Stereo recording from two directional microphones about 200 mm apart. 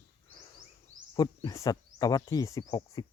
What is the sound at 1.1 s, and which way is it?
Speech, 20° left (ahead or behind).